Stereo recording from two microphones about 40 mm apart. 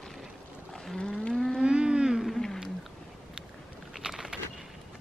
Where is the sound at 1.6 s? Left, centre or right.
Right.